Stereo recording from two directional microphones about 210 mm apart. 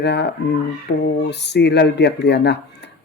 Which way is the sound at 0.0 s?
55° left (ahead or behind).